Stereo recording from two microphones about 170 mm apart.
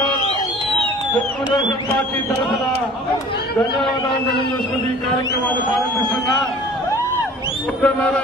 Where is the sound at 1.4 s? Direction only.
30° left (ahead or behind).